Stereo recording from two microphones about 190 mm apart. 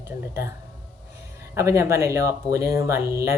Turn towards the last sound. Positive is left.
turn(degrees=-15)  # may be behind; listen again after turning